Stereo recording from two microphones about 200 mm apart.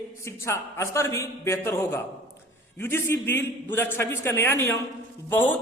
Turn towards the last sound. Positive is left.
turn(degrees=10)  # may be behind; listen again after turning